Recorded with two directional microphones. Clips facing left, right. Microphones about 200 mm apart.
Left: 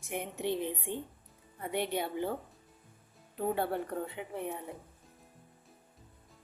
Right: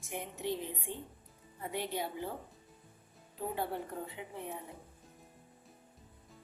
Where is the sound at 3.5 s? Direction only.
65° left (ahead or behind).